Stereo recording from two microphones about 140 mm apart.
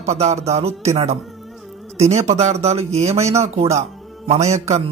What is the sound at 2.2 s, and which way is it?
Speech, 50° right (ahead or behind).